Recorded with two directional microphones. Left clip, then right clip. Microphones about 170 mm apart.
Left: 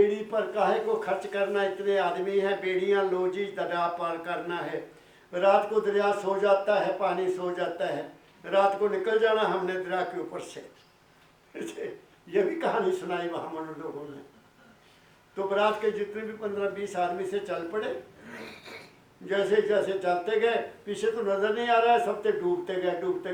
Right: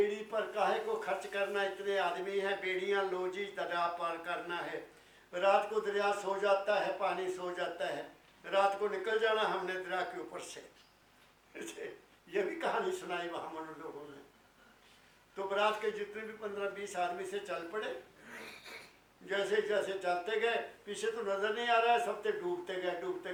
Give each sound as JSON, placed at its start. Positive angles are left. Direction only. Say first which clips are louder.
{"t": 0.0, "sound": "a man's voice", "louder": "left 9 dB", "side_deg": 10}
{"t": 11.5, "sound": "a man's voice", "louder": "left 8 dB", "side_deg": 15}
{"t": 15.4, "sound": "a man's voice", "louder": "left 7 dB", "side_deg": 10}
{"t": 21.2, "sound": "a sound", "louder": "left 7 dB", "side_deg": 20}
{"t": 21.5, "sound": "a man's voice", "louder": "left 6 dB", "side_deg": 10}